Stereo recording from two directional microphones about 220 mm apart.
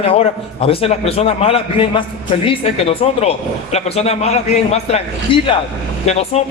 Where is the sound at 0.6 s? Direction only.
25° left (ahead or behind).